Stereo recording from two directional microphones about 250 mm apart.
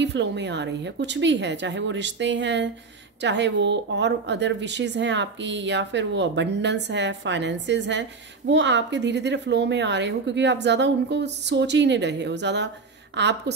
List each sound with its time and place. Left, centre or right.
0.0 s speech: right